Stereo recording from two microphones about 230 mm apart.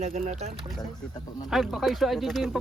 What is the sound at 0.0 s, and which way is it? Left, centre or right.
Speech, right.